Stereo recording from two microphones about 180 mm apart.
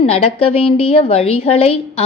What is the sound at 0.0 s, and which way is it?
A woman's voice, 35° left (ahead or behind).